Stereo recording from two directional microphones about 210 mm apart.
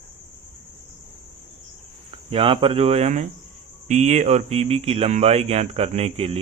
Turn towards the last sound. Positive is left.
turn(degrees=-30)  # may be behind; listen again after turning